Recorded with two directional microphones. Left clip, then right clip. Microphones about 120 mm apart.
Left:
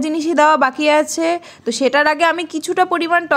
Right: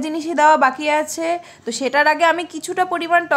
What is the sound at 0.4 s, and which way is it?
A woman's voice, 35° left (ahead or behind).